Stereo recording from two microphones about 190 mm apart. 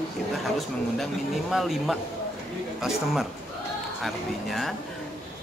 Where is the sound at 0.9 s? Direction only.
Centre (ahead or behind).